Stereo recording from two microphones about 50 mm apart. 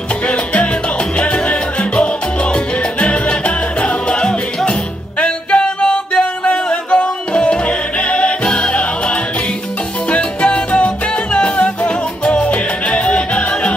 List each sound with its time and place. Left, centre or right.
0.3 s salsa music: left
5.2 s music: left